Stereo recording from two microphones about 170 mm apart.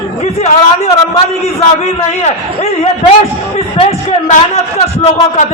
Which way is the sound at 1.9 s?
40° left (ahead or behind).